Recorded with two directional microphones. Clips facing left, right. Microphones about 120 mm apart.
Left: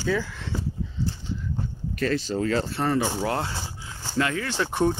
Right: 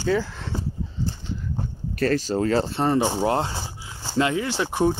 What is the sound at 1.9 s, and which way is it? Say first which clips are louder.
Speech: right 3 dB; 40° right (ahead or behind).